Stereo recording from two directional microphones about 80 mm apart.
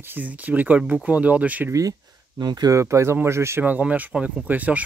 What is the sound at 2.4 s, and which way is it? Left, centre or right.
Speech, right.